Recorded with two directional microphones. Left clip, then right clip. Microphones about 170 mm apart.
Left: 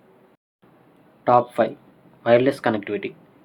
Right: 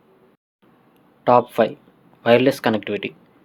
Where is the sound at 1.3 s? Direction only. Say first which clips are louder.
Right 2 dB; 45° right (ahead or behind).